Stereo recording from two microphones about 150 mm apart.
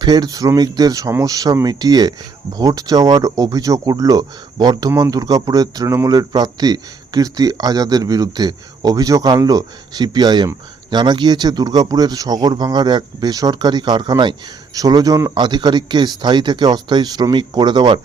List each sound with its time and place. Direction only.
0.0 s speech: 25° right (ahead or behind)